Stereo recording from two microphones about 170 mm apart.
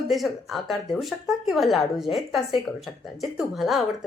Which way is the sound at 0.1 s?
Centre (ahead or behind).